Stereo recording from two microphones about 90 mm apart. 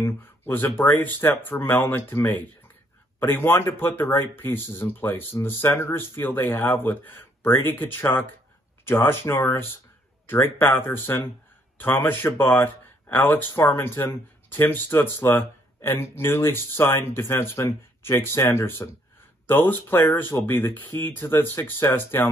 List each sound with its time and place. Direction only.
0.0 s speech: 25° left (ahead or behind)